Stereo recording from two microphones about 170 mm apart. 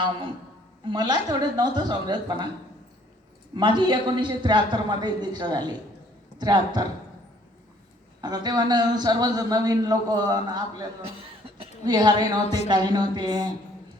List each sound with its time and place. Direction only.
0.9 s a man's voice: 25° right (ahead or behind)
3.5 s a man's voice: 25° right (ahead or behind)
8.2 s a man's voice: 25° right (ahead or behind)